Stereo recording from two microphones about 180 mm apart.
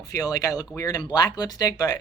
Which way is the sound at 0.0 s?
20° left (ahead or behind).